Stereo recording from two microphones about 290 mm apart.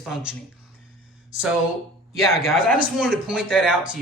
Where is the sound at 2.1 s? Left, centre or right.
Centre.